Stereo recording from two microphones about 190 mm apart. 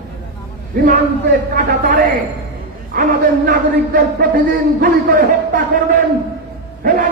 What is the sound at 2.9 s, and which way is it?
A man's voice, 50° right (ahead or behind).